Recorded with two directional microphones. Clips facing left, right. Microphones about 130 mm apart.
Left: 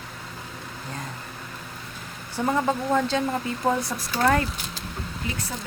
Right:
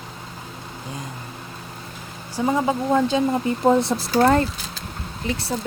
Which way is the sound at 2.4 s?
10° right (ahead or behind).